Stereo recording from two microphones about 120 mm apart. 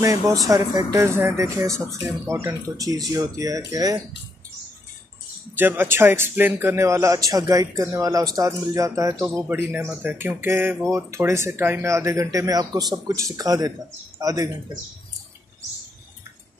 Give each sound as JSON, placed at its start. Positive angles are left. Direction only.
{"t": 0.5, "sound": "a man's voice", "side_deg": -30}
{"t": 5.6, "sound": "a man's voice", "side_deg": -15}